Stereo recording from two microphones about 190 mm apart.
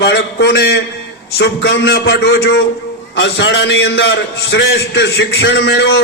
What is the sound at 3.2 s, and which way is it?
A man's voice, 70° left (ahead or behind).